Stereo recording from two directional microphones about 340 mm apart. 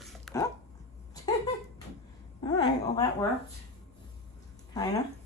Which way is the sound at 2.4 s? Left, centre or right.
Centre.